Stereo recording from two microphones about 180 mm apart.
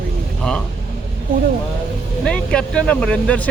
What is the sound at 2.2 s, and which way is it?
Speech, 5° left (ahead or behind).